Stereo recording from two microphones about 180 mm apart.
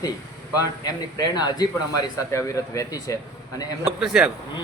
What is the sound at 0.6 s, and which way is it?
Speech, 20° left (ahead or behind).